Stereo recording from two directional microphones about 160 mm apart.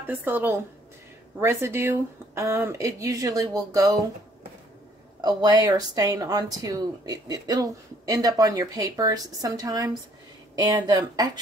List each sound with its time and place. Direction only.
0.0 s speech: 10° right (ahead or behind)
5.2 s a woman's voice: 25° right (ahead or behind)